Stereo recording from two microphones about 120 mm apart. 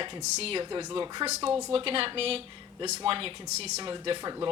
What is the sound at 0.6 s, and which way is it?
Speech, 35° right (ahead or behind).